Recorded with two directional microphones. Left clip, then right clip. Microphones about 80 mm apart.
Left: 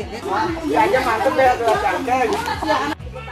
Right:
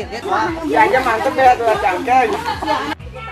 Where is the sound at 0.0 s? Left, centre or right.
Right.